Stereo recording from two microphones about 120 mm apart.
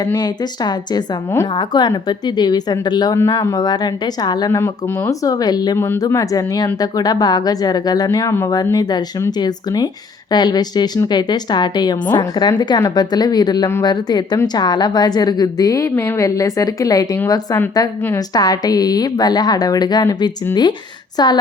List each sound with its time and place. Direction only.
0.0 s a woman's voice: 30° left (ahead or behind)
5.7 s a woman's voice: 20° left (ahead or behind)